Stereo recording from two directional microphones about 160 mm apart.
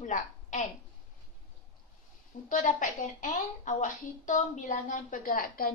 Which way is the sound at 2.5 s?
55° left (ahead or behind).